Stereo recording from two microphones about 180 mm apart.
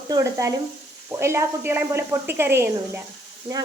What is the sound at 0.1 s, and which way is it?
A woman's voice, 15° right (ahead or behind).